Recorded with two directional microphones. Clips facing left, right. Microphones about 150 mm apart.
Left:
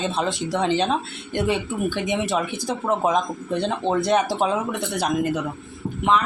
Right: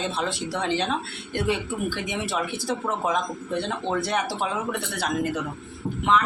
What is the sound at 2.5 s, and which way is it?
Speech, 20° left (ahead or behind).